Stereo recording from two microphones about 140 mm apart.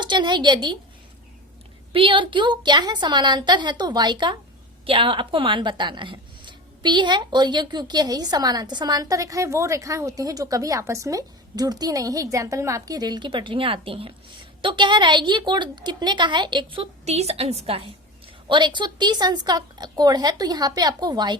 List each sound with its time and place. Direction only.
0.0 s a woman's voice: 35° right (ahead or behind)
1.9 s a woman's voice: 40° right (ahead or behind)